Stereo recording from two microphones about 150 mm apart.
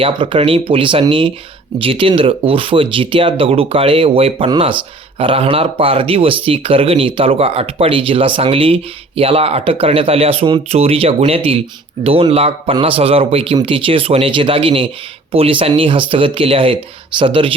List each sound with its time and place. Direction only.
0.0 s speech: 35° right (ahead or behind)